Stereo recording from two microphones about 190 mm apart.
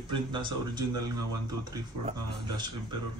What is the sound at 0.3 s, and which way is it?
Speech, 25° right (ahead or behind).